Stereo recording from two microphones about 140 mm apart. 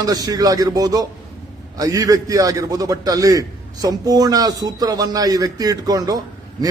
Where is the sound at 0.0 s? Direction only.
25° right (ahead or behind).